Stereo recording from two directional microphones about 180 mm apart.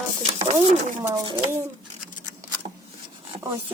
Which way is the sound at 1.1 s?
20° right (ahead or behind).